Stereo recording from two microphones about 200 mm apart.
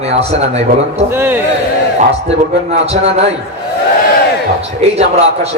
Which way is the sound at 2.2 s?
30° right (ahead or behind).